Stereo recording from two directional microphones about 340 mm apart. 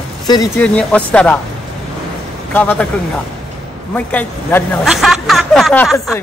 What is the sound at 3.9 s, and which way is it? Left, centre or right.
Speech, centre.